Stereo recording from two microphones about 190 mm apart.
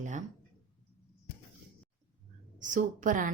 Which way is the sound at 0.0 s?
40° right (ahead or behind).